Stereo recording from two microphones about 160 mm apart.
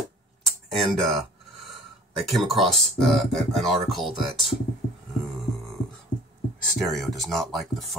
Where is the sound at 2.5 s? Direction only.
Centre (ahead or behind).